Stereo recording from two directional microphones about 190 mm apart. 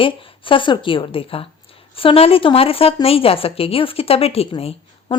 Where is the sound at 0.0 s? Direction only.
30° left (ahead or behind).